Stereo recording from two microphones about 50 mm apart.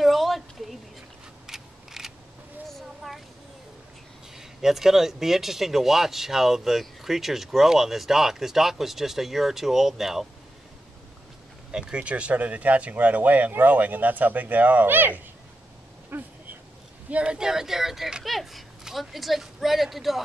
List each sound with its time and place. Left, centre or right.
0.0 s a sound: centre
4.4 s speech: centre
11.7 s speech: centre; by 16.3 s right
17.1 s speech: right
17.4 s speech: centre